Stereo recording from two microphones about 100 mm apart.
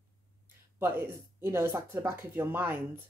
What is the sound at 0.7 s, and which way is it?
Speech, 25° right (ahead or behind).